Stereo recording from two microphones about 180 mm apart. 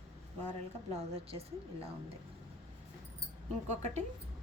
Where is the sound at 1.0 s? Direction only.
35° right (ahead or behind).